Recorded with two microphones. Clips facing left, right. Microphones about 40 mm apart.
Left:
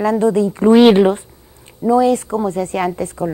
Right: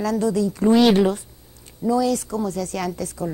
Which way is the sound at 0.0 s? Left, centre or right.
Left.